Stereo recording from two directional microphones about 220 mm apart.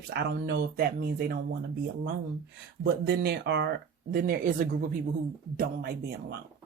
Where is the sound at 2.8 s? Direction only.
50° right (ahead or behind).